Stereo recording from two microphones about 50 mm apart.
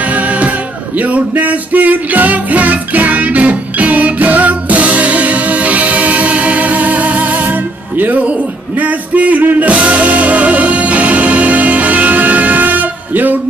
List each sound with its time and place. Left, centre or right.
0.0 s music: right